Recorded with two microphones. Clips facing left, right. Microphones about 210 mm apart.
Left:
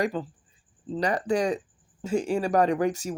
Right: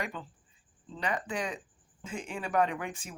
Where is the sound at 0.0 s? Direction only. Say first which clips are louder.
Left 11 dB; 35° left (ahead or behind).